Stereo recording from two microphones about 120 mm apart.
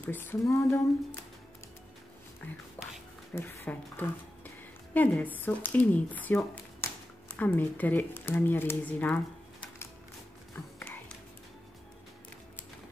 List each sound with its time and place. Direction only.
0.0 s speech: 15° left (ahead or behind)
2.4 s speech: 15° left (ahead or behind)